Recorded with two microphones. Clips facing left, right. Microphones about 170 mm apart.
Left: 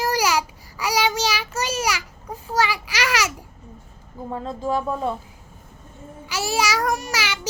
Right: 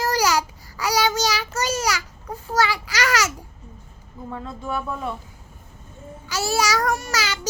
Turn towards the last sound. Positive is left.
turn(degrees=10)  # may be behind; listen again after turning